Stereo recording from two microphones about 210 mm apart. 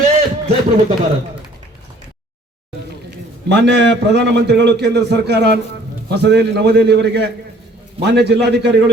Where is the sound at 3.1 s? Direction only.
55° right (ahead or behind).